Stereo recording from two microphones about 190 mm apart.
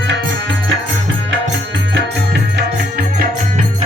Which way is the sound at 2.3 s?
60° right (ahead or behind).